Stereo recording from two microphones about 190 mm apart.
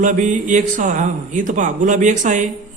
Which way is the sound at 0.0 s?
40° right (ahead or behind).